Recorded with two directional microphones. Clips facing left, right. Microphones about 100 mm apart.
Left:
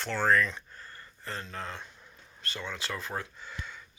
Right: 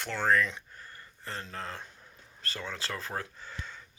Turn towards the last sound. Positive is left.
turn(degrees=-35)  # may be behind; listen again after turning